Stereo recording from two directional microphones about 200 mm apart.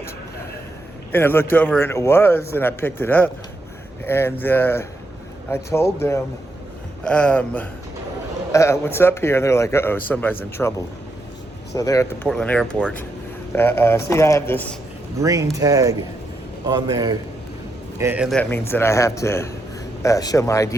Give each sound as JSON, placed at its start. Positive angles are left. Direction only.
{"t": 1.1, "sound": "a man's voice", "side_deg": 10}
{"t": 11.7, "sound": "a man's voice", "side_deg": 15}
{"t": 12.3, "sound": "a man's voice", "side_deg": 5}
{"t": 15.2, "sound": "a man's voice", "side_deg": -15}
{"t": 18.0, "sound": "speech", "side_deg": -10}
{"t": 18.3, "sound": "a man's voice", "side_deg": 10}